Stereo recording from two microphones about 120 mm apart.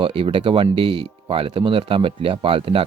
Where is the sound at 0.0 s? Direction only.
50° right (ahead or behind).